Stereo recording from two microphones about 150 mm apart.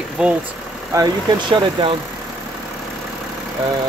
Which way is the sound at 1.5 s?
30° right (ahead or behind).